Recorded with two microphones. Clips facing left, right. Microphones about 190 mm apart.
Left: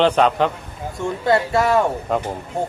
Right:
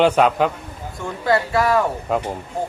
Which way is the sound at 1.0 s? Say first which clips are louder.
Left 2 dB; 25° left (ahead or behind).